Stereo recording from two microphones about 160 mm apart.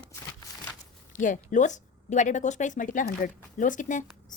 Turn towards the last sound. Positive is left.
turn(degrees=50)  # may be behind; listen again after turning